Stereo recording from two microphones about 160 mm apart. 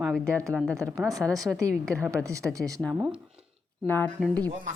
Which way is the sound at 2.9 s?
5° right (ahead or behind).